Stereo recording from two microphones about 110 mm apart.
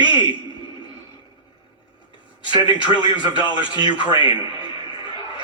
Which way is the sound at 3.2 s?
45° left (ahead or behind).